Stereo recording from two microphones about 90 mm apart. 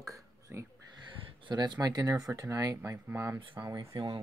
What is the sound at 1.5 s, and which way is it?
Speech, 50° right (ahead or behind).